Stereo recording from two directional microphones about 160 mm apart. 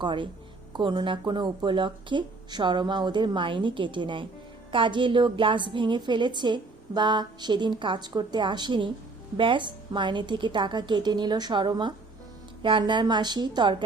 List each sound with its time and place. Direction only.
0.0 s a woman's voice: 30° right (ahead or behind)